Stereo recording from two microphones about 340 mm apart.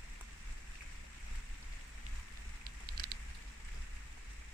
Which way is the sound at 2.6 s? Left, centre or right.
Right.